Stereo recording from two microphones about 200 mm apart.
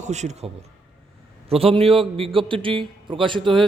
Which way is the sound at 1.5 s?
30° right (ahead or behind).